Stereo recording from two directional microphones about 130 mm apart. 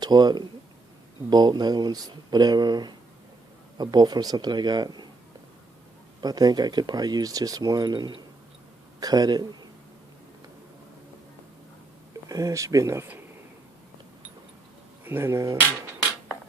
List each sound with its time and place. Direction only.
0.0 s speech: 30° right (ahead or behind)
6.2 s a man's voice: 30° right (ahead or behind)
12.3 s speech: 25° right (ahead or behind)
15.0 s speech: 20° right (ahead or behind)